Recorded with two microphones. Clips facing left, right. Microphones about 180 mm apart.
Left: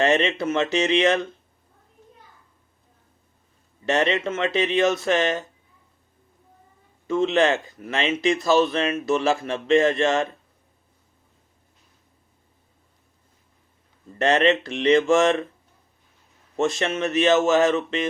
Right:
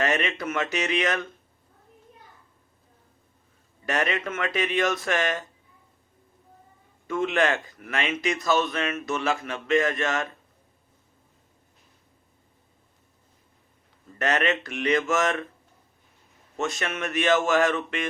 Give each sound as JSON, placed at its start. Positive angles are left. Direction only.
{"t": 0.0, "sound": "speech", "side_deg": 25}
{"t": 3.8, "sound": "speech", "side_deg": 25}
{"t": 7.1, "sound": "speech", "side_deg": 25}
{"t": 14.2, "sound": "speech", "side_deg": 30}
{"t": 16.6, "sound": "speech", "side_deg": 30}